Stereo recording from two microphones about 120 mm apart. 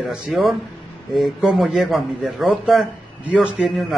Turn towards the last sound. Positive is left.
turn(degrees=-5)  # may be behind; listen again after turning